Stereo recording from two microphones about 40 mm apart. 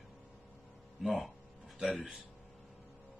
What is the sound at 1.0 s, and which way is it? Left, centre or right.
Speech, centre.